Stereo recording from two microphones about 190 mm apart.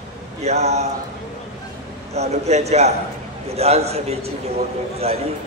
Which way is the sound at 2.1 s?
35° right (ahead or behind).